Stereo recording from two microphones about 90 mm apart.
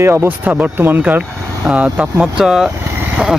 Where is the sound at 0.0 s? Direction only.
30° right (ahead or behind).